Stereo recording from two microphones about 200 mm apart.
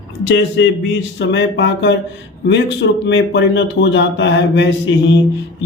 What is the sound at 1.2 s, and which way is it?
A man's voice, 65° left (ahead or behind).